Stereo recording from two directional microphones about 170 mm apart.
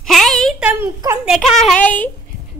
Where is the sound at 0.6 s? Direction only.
15° right (ahead or behind).